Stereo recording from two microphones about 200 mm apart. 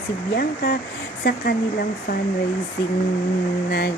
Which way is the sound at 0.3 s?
50° left (ahead or behind).